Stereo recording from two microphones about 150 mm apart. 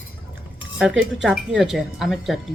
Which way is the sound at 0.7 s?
5° right (ahead or behind).